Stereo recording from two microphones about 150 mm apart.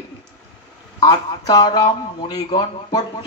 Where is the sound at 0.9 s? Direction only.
25° left (ahead or behind).